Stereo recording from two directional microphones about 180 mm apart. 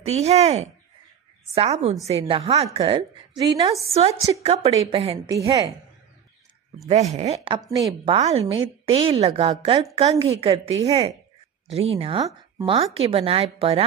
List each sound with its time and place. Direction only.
0.0 s a woman's voice: 35° right (ahead or behind)
3.8 s a woman's voice: 35° right (ahead or behind)
5.1 s a woman's voice: 20° right (ahead or behind)
6.9 s a woman's voice: 40° right (ahead or behind)